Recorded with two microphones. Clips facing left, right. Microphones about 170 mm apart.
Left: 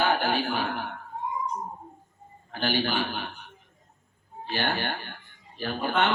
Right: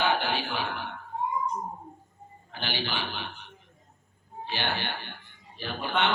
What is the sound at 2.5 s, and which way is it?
Mantra, 45° left (ahead or behind).